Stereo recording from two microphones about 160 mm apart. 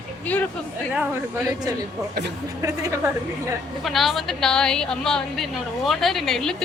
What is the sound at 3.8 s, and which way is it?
A woman's voice, centre (ahead or behind).